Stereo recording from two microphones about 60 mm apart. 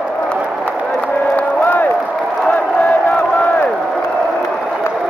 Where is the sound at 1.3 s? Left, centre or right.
Left.